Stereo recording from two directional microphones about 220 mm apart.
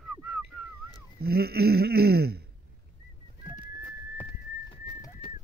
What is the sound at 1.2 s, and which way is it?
Speech, 45° right (ahead or behind).